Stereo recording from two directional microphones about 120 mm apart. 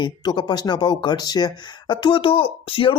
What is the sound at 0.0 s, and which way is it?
Speech, 35° left (ahead or behind).